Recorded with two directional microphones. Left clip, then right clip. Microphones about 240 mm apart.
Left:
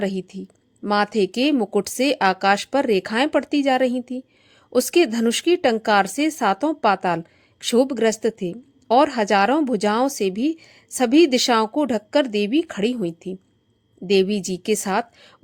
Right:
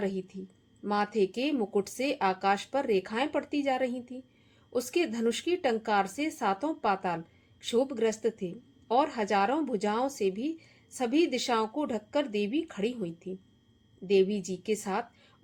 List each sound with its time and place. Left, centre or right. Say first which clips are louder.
0.0 s a woman's voice: left 8 dB; left